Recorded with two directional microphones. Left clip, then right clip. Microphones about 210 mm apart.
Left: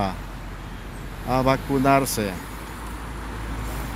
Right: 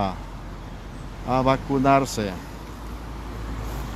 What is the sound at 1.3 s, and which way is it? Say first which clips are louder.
Speech: even; centre (ahead or behind).